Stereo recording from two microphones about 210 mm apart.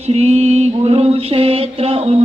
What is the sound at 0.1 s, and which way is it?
Mantra, 30° right (ahead or behind).